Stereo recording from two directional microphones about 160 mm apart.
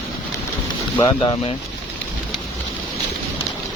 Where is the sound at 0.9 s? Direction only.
25° left (ahead or behind).